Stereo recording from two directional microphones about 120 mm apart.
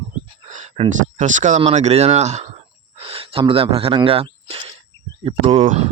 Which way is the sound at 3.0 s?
50° right (ahead or behind).